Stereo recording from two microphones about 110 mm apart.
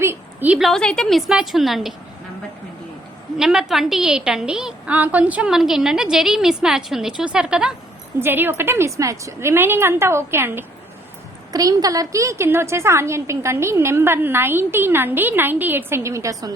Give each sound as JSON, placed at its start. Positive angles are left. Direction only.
{"t": 0.0, "sound": "a sound", "side_deg": -20}
{"t": 0.6, "sound": "a woman's voice", "side_deg": 5}
{"t": 3.3, "sound": "a woman's voice", "side_deg": -5}
{"t": 8.2, "sound": "a woman's voice", "side_deg": -20}
{"t": 11.5, "sound": "a woman's voice", "side_deg": -35}